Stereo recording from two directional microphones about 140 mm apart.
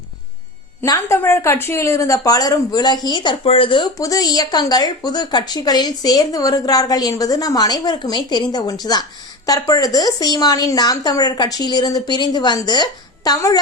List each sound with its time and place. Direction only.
0.8 s speech: 20° left (ahead or behind)